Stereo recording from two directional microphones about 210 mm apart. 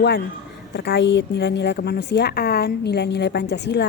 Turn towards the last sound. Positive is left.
turn(degrees=55)  # may be behind; listen again after turning